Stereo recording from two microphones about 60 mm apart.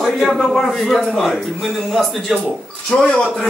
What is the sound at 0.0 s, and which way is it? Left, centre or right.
A man's voice, centre.